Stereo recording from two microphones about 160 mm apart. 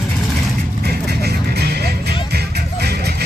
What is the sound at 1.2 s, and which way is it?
Music, 85° right.